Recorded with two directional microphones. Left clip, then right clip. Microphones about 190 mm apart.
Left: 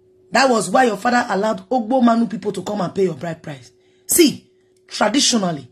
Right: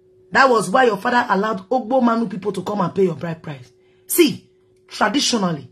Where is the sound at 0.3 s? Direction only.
20° left (ahead or behind).